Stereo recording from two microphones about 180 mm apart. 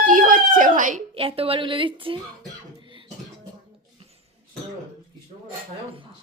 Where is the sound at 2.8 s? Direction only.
30° right (ahead or behind).